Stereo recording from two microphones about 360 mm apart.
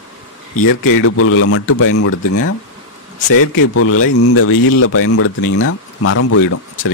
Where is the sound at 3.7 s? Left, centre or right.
Left.